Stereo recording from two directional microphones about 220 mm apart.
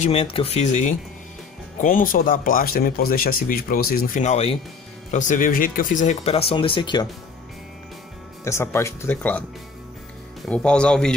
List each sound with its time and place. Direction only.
0.0 s speech: 25° left (ahead or behind)
8.5 s speech: 10° left (ahead or behind)
10.4 s speech: 5° left (ahead or behind)